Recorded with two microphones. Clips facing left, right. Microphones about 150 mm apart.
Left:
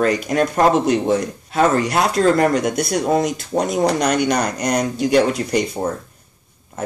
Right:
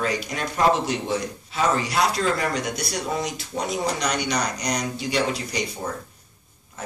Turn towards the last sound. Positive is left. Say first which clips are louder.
# left 9 dB
turn(degrees=50)  # may be behind; listen again after turning